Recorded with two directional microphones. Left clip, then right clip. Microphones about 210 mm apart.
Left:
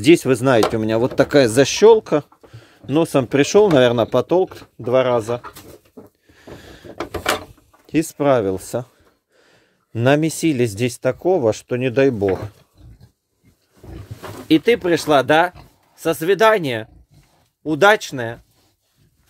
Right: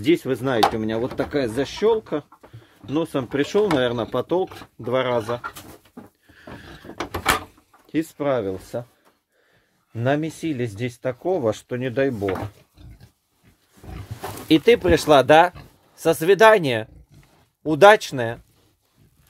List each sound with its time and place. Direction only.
0.0 s speech: 30° left (ahead or behind)
6.3 s boat: 20° left (ahead or behind)
7.8 s speech: 30° left (ahead or behind)
11.2 s speech: 25° left (ahead or behind)
14.5 s speech: 5° left (ahead or behind)